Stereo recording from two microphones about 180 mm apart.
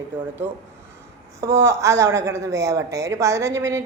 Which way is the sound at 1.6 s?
15° right (ahead or behind).